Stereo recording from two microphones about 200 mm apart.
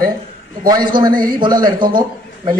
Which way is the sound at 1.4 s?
20° right (ahead or behind).